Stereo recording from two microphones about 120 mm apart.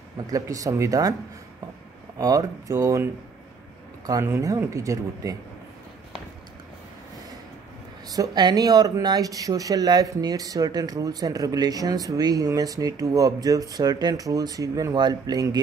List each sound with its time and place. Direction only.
0.3 s speech: 30° right (ahead or behind)
2.1 s speech: 30° right (ahead or behind)
8.1 s speech: 35° right (ahead or behind)